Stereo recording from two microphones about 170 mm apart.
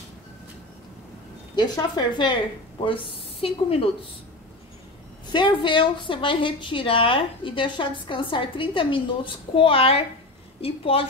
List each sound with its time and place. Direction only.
1.5 s a woman's voice: 25° left (ahead or behind)
5.3 s a woman's voice: 30° left (ahead or behind)